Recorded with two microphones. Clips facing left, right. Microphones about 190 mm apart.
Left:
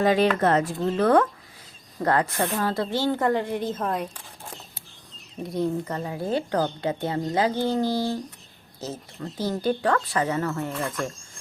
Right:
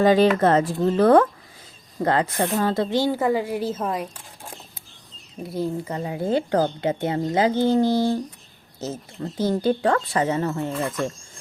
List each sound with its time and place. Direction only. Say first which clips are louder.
0.0 s speech: right 4 dB; 30° right (ahead or behind)
2.0 s a woman's voice: right 2 dB; 20° right (ahead or behind); by 4.1 s 5° right (ahead or behind)
5.4 s a woman's voice: even; 5° right (ahead or behind); by 8.2 s 20° right (ahead or behind)
9.2 s speech: right 4 dB; 25° right (ahead or behind)